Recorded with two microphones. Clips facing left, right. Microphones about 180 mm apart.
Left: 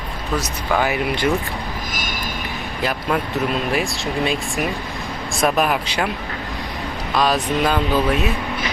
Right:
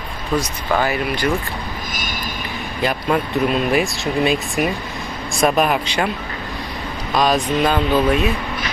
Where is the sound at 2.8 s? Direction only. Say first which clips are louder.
Right 3 dB; centre (ahead or behind).